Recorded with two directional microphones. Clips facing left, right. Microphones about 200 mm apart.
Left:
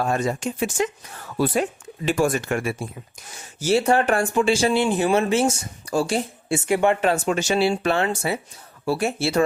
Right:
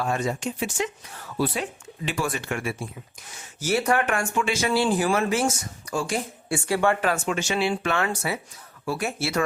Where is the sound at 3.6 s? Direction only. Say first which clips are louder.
Left 4 dB; 30° left (ahead or behind).